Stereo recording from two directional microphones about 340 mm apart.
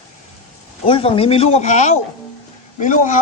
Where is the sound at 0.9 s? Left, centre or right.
Centre.